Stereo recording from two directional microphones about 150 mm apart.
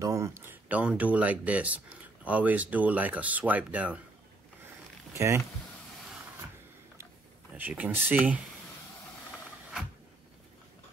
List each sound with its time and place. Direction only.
0.0 s speech: 20° right (ahead or behind)
5.1 s speech: 20° right (ahead or behind)
7.5 s speech: 10° right (ahead or behind)